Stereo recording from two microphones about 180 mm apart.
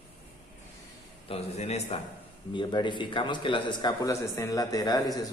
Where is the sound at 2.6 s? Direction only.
25° left (ahead or behind).